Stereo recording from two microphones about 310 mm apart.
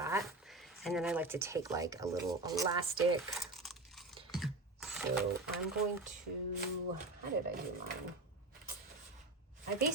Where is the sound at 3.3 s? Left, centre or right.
Centre.